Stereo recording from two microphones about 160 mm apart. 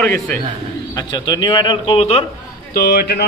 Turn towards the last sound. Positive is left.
turn(degrees=70)  # may be behind; listen again after turning